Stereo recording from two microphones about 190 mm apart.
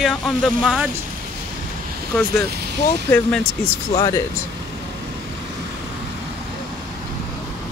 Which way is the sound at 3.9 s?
20° left (ahead or behind).